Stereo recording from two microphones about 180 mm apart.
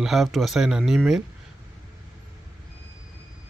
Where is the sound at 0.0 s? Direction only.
Centre (ahead or behind).